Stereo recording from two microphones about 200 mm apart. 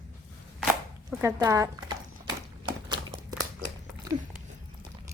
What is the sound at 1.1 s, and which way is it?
Speech, 15° right (ahead or behind).